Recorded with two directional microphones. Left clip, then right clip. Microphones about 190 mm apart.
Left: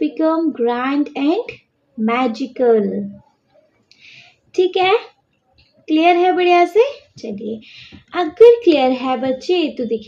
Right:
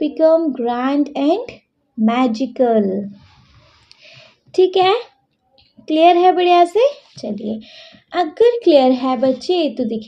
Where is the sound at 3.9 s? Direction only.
50° right (ahead or behind).